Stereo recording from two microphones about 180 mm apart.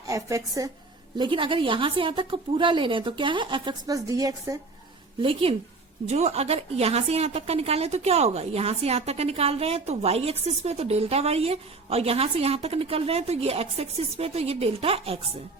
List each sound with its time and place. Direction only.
0.1 s a woman's voice: 15° right (ahead or behind)
5.2 s a woman's voice: 30° right (ahead or behind)